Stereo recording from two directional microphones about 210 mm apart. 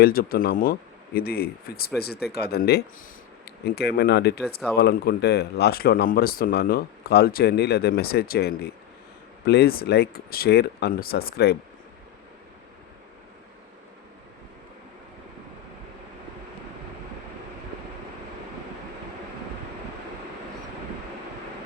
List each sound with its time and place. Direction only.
0.0 s speech: 45° left (ahead or behind)